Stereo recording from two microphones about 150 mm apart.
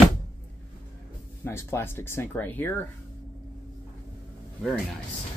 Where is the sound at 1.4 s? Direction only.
15° left (ahead or behind).